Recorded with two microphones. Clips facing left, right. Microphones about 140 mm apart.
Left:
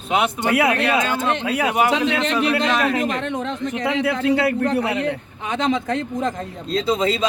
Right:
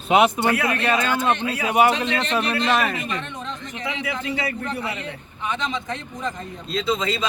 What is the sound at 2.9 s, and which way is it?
A man's voice, 90° left.